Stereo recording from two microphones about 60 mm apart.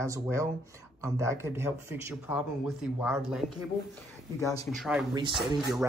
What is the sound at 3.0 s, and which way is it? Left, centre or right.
Speech, centre.